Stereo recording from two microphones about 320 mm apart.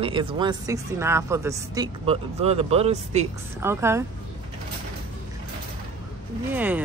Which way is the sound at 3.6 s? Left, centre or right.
Centre.